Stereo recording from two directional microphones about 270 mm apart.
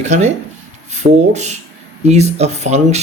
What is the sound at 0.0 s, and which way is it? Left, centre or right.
Speech, right.